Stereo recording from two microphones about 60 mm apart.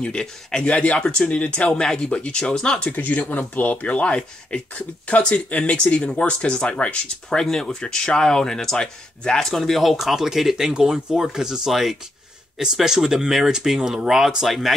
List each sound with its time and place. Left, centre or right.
0.0 s speech: centre
3.0 s speech: left; by 9.5 s centre
9.5 s speech: centre